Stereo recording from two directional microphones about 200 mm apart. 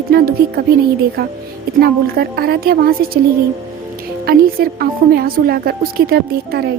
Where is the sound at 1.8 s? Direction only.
50° right (ahead or behind).